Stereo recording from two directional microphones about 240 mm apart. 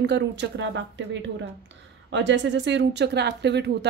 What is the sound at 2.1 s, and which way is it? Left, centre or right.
A woman's voice, right.